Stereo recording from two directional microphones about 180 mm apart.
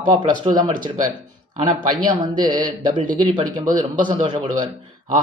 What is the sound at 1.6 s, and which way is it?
Speech, 25° right (ahead or behind).